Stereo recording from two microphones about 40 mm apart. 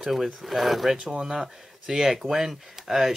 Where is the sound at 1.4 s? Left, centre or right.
Centre.